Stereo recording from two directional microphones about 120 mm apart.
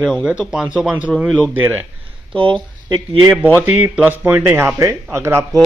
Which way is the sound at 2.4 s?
40° right (ahead or behind).